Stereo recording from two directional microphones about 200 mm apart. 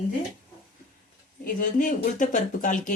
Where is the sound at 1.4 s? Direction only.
40° left (ahead or behind).